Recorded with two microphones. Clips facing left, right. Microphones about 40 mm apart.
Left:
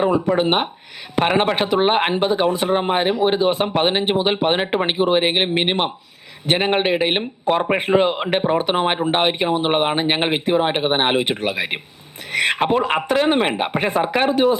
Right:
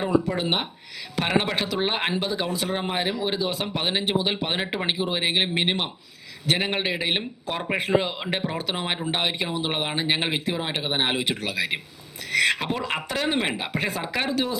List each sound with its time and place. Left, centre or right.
0.0 s speech: left